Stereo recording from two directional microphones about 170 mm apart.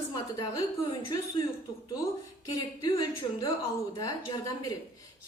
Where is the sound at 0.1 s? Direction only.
25° left (ahead or behind).